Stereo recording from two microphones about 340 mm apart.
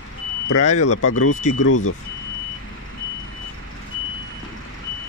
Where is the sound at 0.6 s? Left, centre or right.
Centre.